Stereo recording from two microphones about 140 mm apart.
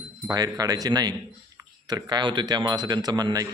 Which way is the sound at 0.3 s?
25° right (ahead or behind).